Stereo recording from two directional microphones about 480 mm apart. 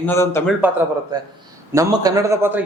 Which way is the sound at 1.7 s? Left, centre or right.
Centre.